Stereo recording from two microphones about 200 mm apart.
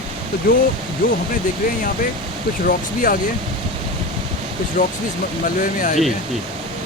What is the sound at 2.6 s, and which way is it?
Speech, 45° left (ahead or behind).